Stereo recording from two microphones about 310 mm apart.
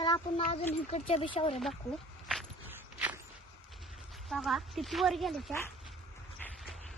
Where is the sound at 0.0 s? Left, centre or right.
Centre.